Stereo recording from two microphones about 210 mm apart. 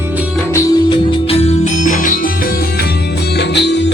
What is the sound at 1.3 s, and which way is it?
Music, 30° left (ahead or behind).